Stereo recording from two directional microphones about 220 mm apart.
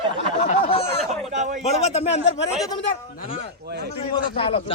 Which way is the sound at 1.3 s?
35° right (ahead or behind).